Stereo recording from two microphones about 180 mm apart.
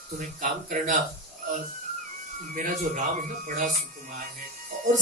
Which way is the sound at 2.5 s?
45° right (ahead or behind).